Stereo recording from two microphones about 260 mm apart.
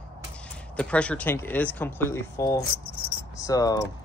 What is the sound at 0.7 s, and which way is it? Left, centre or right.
Speech, centre.